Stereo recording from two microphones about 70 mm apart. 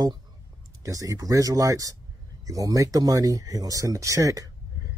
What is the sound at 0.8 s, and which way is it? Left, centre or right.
Speech, right.